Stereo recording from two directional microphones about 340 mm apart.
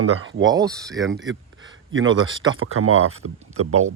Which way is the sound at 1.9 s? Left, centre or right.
Right.